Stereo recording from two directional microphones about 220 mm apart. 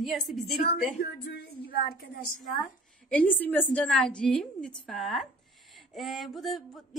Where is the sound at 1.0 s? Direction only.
45° left (ahead or behind).